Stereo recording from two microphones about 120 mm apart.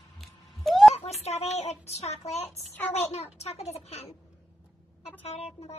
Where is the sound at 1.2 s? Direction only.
65° left (ahead or behind).